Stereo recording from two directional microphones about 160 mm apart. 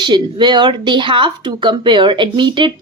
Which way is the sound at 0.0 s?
30° right (ahead or behind).